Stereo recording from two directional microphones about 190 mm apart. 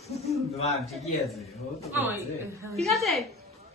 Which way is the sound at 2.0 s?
10° right (ahead or behind).